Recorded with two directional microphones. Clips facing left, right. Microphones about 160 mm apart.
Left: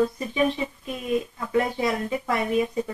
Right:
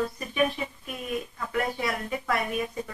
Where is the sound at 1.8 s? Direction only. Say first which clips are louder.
Left 5 dB; 25° left (ahead or behind).